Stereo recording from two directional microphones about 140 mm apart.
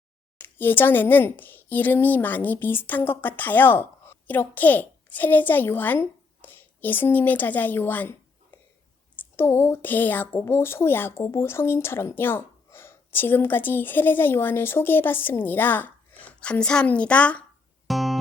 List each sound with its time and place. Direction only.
0.4 s speech: 15° left (ahead or behind)
17.8 s music: centre (ahead or behind)